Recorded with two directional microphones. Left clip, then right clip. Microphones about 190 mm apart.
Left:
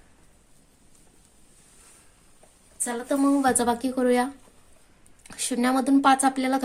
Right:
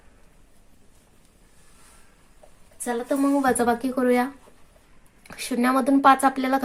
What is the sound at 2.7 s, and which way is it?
A woman's voice, centre (ahead or behind).